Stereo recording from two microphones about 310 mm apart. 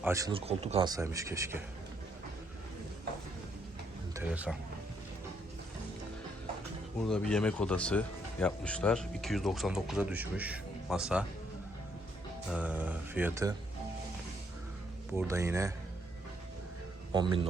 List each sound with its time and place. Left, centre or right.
0.0 s speech: centre
4.1 s speech: centre
7.0 s speech: centre
12.5 s speech: centre
15.1 s speech: centre
17.1 s speech: centre